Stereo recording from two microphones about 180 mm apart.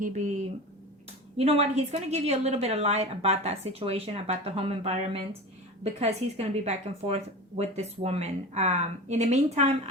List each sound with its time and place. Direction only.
1.4 s speech: 35° right (ahead or behind)